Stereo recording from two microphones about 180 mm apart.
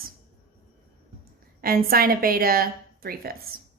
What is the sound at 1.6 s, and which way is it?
A woman's voice, 55° right (ahead or behind).